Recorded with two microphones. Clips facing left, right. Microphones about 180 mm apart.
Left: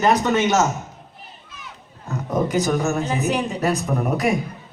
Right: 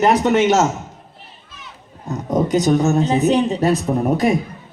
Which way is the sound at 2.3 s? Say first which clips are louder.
Right 5 dB; 20° right (ahead or behind).